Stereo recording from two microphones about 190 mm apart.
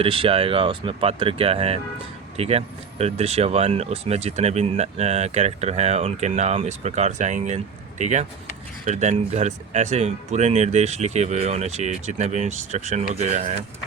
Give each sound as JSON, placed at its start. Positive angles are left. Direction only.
{"t": 0.0, "sound": "speech", "side_deg": -30}